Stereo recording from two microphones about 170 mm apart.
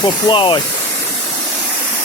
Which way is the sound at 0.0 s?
30° left (ahead or behind).